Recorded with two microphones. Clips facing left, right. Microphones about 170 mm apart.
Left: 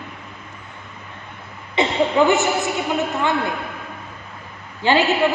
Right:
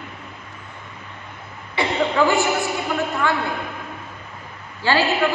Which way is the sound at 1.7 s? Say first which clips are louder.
Left 3 dB; 20° left (ahead or behind).